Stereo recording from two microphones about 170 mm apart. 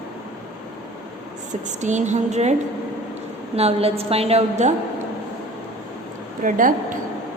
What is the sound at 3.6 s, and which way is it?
A woman's voice, 35° right (ahead or behind).